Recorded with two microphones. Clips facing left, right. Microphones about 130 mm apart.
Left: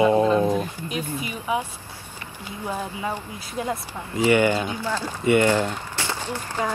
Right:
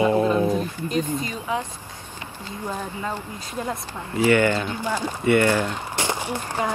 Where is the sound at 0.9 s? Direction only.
10° left (ahead or behind).